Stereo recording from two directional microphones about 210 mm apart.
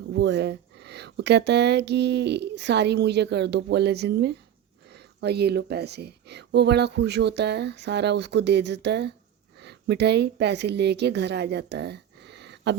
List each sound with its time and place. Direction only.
0.1 s a woman's voice: 55° right (ahead or behind)